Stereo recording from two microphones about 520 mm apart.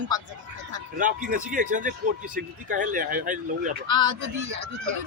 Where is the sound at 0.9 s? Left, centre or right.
Centre.